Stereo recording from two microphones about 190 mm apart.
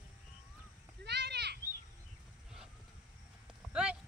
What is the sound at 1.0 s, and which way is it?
Goat, 65° right (ahead or behind).